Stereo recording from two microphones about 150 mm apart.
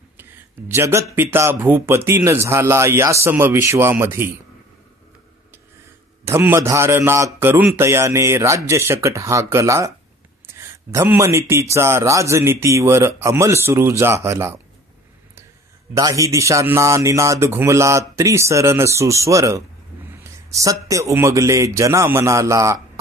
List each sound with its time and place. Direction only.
0.7 s a man's voice: 20° right (ahead or behind)
6.2 s a man's voice: 15° right (ahead or behind)
15.9 s speech: 20° right (ahead or behind)